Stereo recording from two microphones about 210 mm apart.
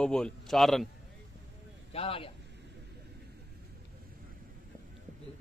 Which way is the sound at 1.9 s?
25° left (ahead or behind).